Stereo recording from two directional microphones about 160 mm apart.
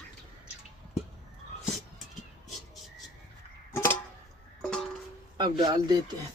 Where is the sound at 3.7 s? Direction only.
15° left (ahead or behind).